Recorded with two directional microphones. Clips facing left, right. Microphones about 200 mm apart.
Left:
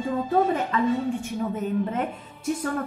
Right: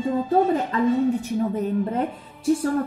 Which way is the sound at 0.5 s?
35° right (ahead or behind).